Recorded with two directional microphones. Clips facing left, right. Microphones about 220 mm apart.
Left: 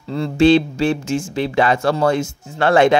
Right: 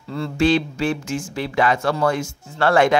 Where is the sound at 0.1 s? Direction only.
25° left (ahead or behind).